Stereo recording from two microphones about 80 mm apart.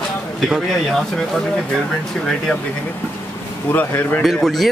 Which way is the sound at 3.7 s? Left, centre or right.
Left.